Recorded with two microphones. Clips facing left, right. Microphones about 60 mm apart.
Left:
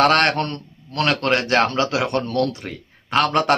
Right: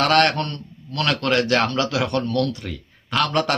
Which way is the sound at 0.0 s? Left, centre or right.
Left.